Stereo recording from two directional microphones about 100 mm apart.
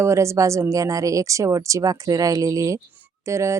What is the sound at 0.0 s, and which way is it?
Speech, 30° right (ahead or behind).